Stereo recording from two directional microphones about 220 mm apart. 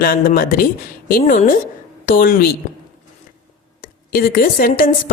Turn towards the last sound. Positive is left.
turn(degrees=40)  # may be behind; listen again after turning